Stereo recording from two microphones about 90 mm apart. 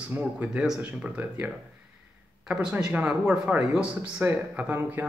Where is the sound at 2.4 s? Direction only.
5° right (ahead or behind).